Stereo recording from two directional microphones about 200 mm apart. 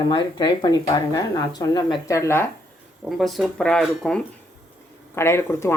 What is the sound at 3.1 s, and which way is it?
Speech, centre (ahead or behind).